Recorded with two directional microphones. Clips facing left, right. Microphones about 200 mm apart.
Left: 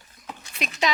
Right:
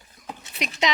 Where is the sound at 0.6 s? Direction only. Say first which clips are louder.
Right 1 dB; 20° right (ahead or behind).